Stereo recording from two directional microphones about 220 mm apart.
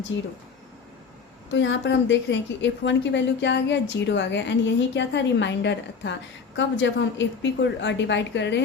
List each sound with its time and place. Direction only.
0.1 s a woman's voice: 55° left (ahead or behind)
1.5 s a woman's voice: 55° left (ahead or behind)